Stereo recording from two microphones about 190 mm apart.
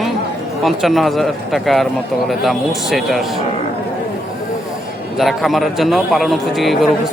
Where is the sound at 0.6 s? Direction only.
Centre (ahead or behind).